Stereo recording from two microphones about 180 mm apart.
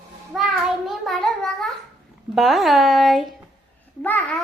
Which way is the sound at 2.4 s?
Centre (ahead or behind).